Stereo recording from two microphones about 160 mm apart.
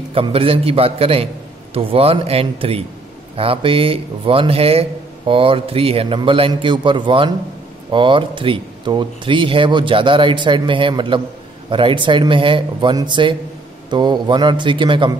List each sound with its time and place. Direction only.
0.1 s a man's voice: 35° right (ahead or behind)